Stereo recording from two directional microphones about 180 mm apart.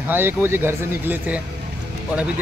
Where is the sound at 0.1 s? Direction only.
10° right (ahead or behind).